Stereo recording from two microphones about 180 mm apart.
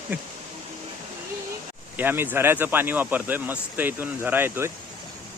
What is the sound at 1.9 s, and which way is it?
Speech, 10° right (ahead or behind).